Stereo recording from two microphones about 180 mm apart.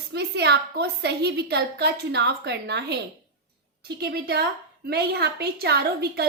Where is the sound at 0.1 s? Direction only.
70° right (ahead or behind).